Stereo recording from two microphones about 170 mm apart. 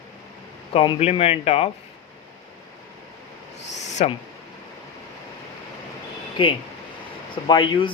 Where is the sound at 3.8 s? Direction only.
45° left (ahead or behind).